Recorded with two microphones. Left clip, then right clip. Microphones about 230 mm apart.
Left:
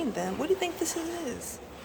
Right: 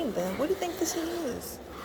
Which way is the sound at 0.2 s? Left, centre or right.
Centre.